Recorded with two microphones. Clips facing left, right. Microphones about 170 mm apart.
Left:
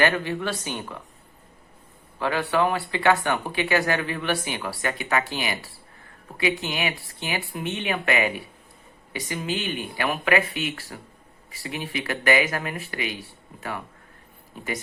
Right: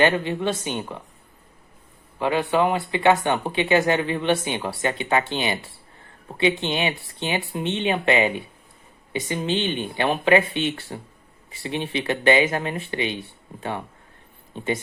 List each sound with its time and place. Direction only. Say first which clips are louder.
0.0 s speech: right 3 dB; 20° right (ahead or behind)
2.1 s speech: right 3 dB; 20° right (ahead or behind)